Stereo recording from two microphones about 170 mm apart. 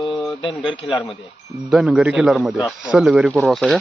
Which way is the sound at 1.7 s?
5° right (ahead or behind).